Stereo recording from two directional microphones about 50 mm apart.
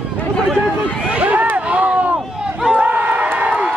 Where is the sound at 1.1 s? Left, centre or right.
Right.